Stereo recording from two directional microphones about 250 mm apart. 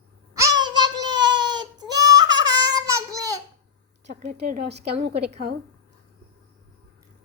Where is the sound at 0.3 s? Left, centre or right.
Centre.